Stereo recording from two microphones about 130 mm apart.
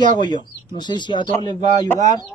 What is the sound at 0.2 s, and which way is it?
Speech, 35° left (ahead or behind).